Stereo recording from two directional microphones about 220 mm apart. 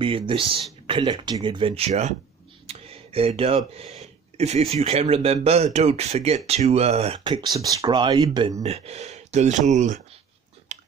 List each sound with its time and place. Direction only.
0.0 s speech: 25° right (ahead or behind)
10.7 s chewing: 35° right (ahead or behind)